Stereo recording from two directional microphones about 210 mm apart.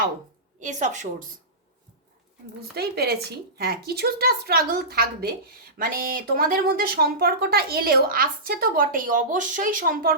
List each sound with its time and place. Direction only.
0.6 s a woman's voice: 35° right (ahead or behind)
2.7 s speech: 50° right (ahead or behind)